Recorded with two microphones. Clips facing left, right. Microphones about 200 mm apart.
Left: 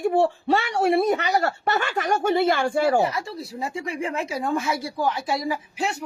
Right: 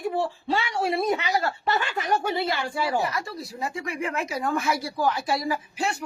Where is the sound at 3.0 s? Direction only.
25° left (ahead or behind).